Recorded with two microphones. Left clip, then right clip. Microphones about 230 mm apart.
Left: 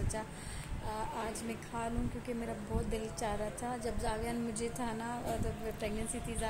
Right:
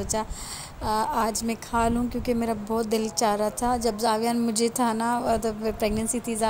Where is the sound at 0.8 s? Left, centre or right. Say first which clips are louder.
Right 15 dB; right.